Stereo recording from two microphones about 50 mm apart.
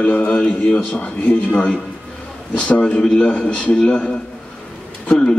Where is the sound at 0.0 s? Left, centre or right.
Left.